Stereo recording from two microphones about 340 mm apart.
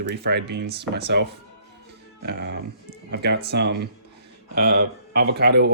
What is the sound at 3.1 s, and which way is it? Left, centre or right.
Speech, right.